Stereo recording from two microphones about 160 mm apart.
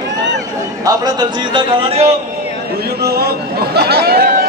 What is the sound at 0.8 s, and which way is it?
A man's voice, 25° right (ahead or behind).